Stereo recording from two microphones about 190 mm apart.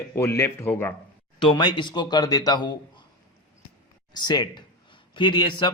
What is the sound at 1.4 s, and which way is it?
A man's voice, 25° left (ahead or behind).